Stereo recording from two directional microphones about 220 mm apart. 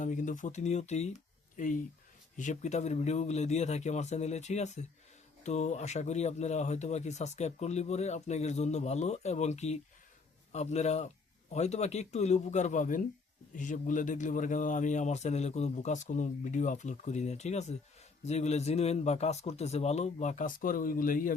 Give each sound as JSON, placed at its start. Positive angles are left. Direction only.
{"t": 0.0, "sound": "speech", "side_deg": 35}